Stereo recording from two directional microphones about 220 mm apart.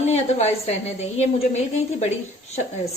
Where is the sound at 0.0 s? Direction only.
30° left (ahead or behind).